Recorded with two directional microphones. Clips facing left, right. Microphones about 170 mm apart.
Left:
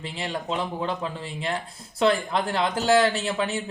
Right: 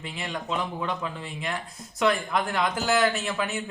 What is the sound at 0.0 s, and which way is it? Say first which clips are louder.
Speech: left 3 dB; 30° left (ahead or behind).